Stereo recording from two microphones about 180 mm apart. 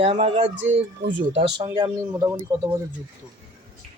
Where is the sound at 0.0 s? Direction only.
35° right (ahead or behind); by 2.6 s 20° right (ahead or behind).